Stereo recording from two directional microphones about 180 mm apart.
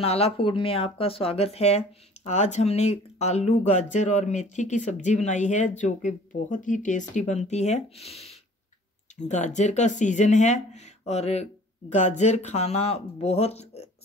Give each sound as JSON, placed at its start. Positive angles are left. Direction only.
{"t": 0.0, "sound": "speech", "side_deg": 35}